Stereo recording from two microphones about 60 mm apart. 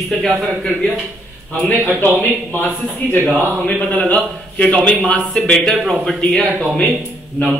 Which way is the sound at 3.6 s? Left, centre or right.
Left.